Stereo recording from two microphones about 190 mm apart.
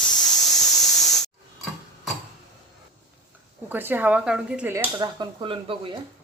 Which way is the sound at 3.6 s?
10° right (ahead or behind).